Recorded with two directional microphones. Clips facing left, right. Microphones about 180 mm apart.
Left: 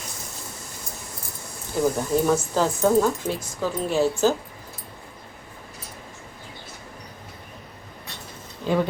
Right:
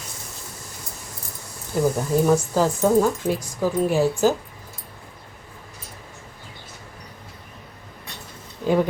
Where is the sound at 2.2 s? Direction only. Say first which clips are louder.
Right 5 dB; 5° right (ahead or behind).